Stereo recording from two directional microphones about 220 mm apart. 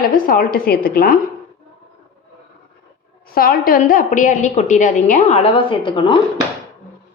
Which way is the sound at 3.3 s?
40° left (ahead or behind).